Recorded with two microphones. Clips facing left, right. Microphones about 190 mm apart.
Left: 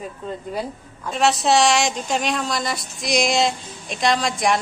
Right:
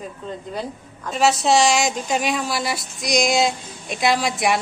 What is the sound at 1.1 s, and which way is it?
A woman's voice, centre (ahead or behind).